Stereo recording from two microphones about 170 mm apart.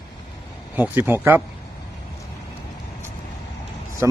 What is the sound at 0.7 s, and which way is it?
Speech, 10° right (ahead or behind).